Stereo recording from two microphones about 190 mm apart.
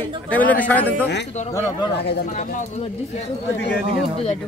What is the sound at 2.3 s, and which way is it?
Speech, 40° left (ahead or behind).